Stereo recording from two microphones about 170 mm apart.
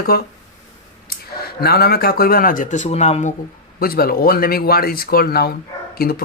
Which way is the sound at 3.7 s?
60° left (ahead or behind).